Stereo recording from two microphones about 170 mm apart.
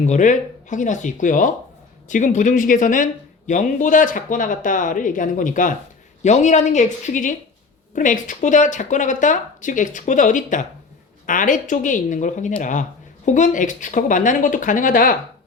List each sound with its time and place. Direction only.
0.0 s speech: 45° left (ahead or behind)